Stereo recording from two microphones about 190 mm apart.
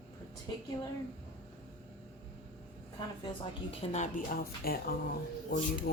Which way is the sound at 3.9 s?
40° left (ahead or behind).